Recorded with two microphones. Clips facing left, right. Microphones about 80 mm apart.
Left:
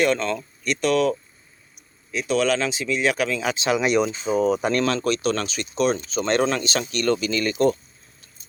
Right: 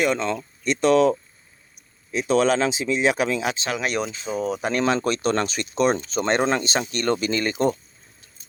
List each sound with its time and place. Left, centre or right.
0.0 s speech: centre
2.1 s speech: right
3.8 s speech: centre
4.7 s speech: centre
4.9 s speech: right
6.2 s speech: right